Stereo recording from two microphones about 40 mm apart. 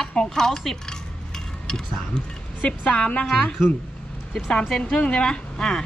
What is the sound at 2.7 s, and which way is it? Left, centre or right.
Speech, left.